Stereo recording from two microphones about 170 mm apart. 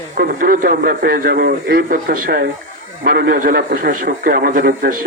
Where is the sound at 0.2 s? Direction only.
55° right (ahead or behind).